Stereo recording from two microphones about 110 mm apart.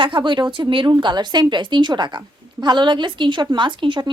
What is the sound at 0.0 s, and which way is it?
A woman's voice, 45° right (ahead or behind).